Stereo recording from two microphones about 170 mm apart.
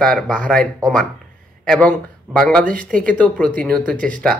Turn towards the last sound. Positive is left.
turn(degrees=5)  # may be behind; listen again after turning